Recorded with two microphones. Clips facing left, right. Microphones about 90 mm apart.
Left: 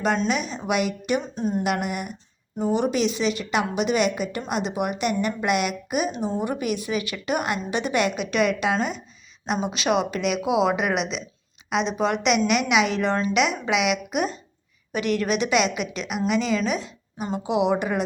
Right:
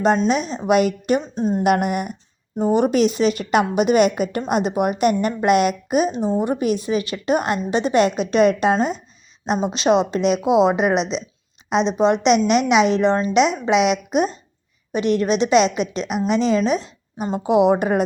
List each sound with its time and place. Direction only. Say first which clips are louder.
0.3 s speech: right 6 dB; 35° right (ahead or behind)
1.4 s a woman's voice: right 4 dB; 30° right (ahead or behind)
1.6 s a woman's voice: right 7 dB; 50° right (ahead or behind)